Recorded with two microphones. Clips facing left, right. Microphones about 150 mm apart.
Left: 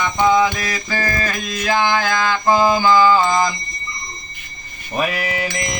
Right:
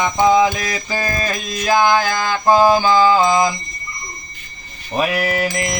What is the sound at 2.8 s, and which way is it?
Music, 15° right (ahead or behind).